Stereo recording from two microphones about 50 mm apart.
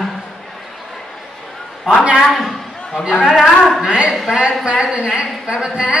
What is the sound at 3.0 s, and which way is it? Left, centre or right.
A woman's voice, centre.